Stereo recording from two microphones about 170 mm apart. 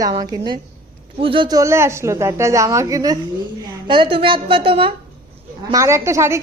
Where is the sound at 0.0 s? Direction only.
25° right (ahead or behind).